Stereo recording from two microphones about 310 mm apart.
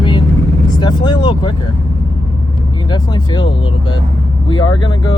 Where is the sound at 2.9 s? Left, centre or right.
Centre.